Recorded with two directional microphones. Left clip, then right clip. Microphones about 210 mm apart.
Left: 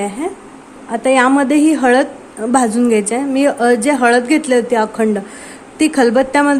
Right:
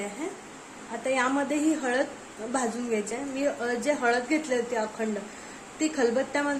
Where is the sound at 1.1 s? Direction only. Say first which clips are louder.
Left 15 dB; 45° left (ahead or behind).